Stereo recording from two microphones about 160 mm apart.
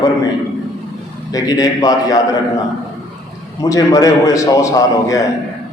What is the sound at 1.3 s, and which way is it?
Speech, 25° left (ahead or behind).